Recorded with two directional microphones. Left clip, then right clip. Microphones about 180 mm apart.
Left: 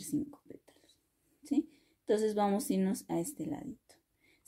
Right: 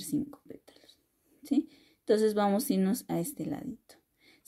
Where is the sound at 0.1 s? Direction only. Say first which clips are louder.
Right 3 dB; 25° right (ahead or behind).